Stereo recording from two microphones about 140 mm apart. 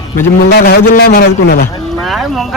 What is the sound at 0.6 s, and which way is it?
A man's voice, 90° left.